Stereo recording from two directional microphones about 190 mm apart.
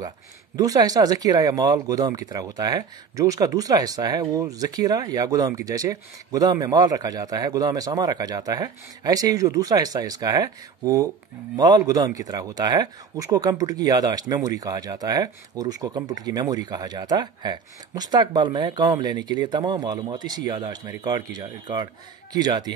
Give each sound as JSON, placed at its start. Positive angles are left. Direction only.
{"t": 0.6, "sound": "speech", "side_deg": -20}